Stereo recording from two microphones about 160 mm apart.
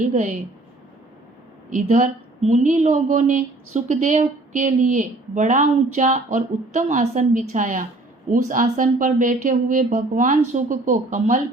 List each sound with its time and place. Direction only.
0.1 s a woman's voice: 50° right (ahead or behind)
1.7 s a woman's voice: 50° right (ahead or behind)